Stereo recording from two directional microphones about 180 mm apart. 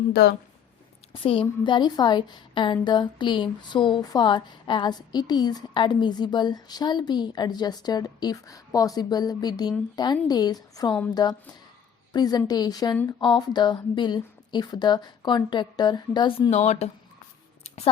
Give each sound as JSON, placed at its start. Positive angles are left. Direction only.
{"t": 0.1, "sound": "speech", "side_deg": 60}
{"t": 1.1, "sound": "a woman's voice", "side_deg": 30}
{"t": 16.5, "sound": "speech", "side_deg": 40}